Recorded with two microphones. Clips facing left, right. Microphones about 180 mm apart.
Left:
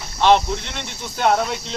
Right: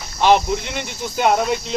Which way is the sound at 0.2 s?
5° right (ahead or behind).